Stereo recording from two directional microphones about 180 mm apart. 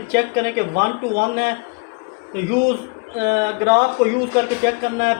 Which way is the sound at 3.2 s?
60° right (ahead or behind).